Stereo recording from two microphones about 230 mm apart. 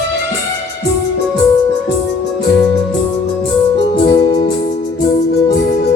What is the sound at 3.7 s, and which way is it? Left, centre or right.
Music, centre.